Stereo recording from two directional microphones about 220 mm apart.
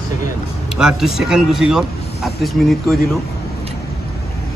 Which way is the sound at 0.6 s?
Centre (ahead or behind).